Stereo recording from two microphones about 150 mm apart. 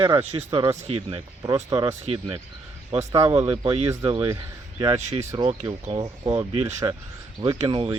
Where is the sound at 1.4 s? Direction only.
25° right (ahead or behind).